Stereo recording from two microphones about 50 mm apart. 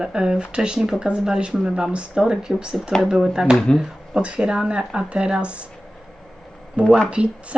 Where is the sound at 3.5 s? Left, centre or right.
Centre.